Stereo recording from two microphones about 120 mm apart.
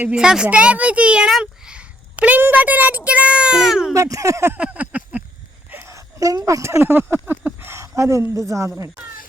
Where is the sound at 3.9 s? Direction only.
25° right (ahead or behind).